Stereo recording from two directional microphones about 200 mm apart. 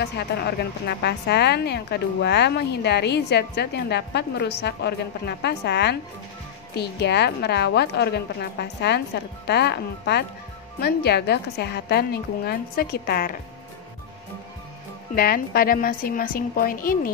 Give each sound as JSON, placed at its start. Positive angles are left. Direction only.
{"t": 0.0, "sound": "a woman's voice", "side_deg": 55}
{"t": 15.1, "sound": "a woman's voice", "side_deg": 50}